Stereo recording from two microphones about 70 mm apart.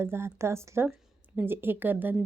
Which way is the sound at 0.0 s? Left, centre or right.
Right.